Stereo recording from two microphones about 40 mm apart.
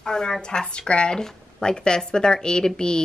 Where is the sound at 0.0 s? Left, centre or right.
Centre.